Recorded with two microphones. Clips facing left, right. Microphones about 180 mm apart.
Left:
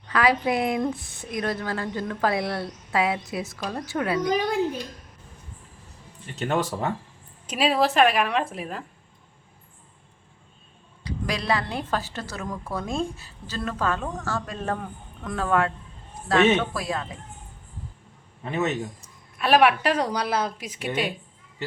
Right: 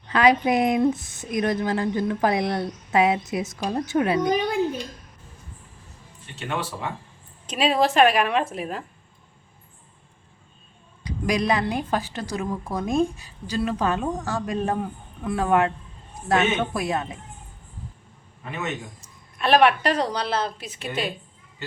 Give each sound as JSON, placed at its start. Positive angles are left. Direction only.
{"t": 0.1, "sound": "speech", "side_deg": -20}
{"t": 6.4, "sound": "speech", "side_deg": 40}
{"t": 7.4, "sound": "a woman's voice", "side_deg": 5}
{"t": 11.0, "sound": "a woman's voice", "side_deg": -15}
{"t": 18.4, "sound": "speech", "side_deg": 35}
{"t": 19.4, "sound": "a woman's voice", "side_deg": 5}